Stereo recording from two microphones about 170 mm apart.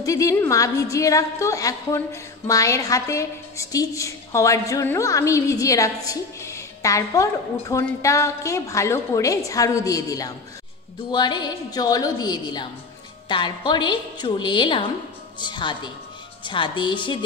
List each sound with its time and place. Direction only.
0.0 s a woman's voice: 20° left (ahead or behind)